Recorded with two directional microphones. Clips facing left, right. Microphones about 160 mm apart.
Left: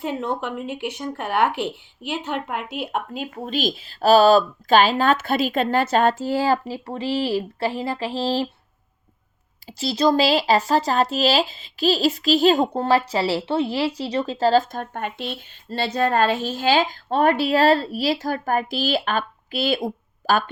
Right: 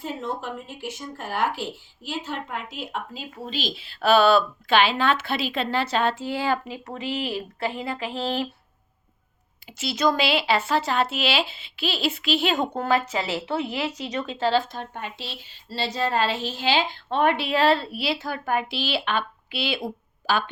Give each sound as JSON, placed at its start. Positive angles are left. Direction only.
{"t": 0.0, "sound": "speech", "side_deg": 65}
{"t": 9.6, "sound": "speech", "side_deg": 35}